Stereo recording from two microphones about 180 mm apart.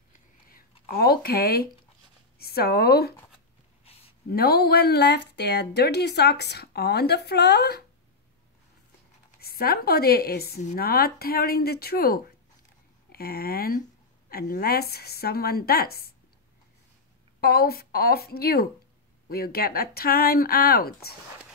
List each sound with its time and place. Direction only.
0.5 s speech: 55° left (ahead or behind)
3.9 s a sound: 35° left (ahead or behind)
4.3 s speech: 60° left (ahead or behind)
9.4 s speech: 55° left (ahead or behind)
17.4 s speech: 60° left (ahead or behind)